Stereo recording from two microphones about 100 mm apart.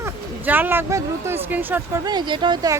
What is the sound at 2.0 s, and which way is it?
Speech, 50° right (ahead or behind).